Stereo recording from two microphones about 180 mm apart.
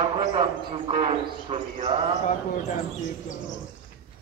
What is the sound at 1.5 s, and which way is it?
Bird, 30° right (ahead or behind).